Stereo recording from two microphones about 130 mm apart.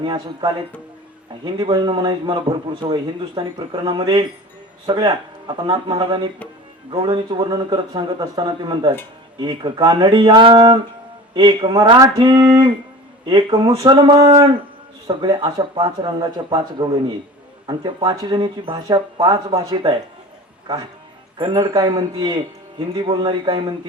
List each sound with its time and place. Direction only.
0.0 s a man's voice: 35° right (ahead or behind)
1.5 s a man's voice: 35° right (ahead or behind)
21.3 s a man's voice: 35° right (ahead or behind)